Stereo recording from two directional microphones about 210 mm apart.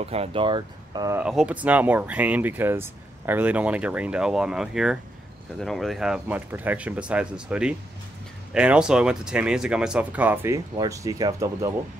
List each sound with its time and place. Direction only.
0.0 s speech: 30° right (ahead or behind)
1.2 s speech: 5° right (ahead or behind)